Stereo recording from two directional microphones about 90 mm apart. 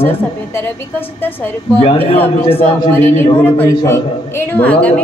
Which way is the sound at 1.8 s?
90° left.